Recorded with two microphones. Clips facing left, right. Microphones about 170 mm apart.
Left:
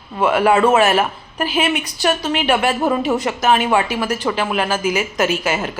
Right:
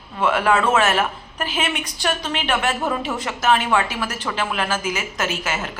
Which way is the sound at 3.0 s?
15° left (ahead or behind).